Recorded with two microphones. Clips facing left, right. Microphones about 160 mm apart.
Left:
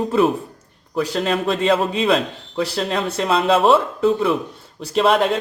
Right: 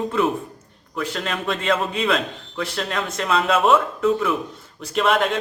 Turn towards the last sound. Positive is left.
turn(degrees=35)  # may be behind; listen again after turning